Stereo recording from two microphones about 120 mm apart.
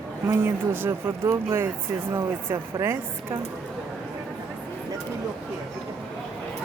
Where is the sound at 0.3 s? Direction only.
20° right (ahead or behind).